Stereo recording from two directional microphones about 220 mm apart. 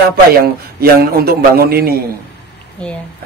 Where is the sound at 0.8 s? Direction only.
45° right (ahead or behind).